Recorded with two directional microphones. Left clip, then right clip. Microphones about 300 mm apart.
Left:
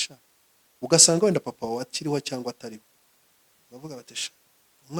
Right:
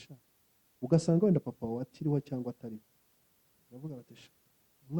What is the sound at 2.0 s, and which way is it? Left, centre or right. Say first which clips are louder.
Speech: left 7 dB; centre.